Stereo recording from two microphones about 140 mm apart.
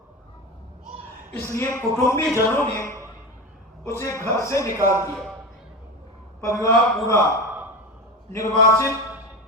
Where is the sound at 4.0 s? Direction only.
20° left (ahead or behind).